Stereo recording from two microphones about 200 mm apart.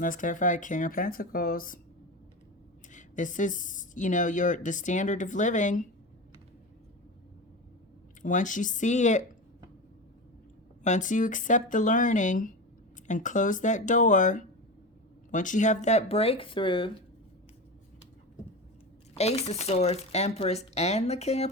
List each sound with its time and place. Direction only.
0.0 s speech: 40° left (ahead or behind)
2.9 s speech: 40° left (ahead or behind)
8.2 s speech: 40° left (ahead or behind)
10.8 s speech: 40° left (ahead or behind)
19.1 s speech: 30° left (ahead or behind)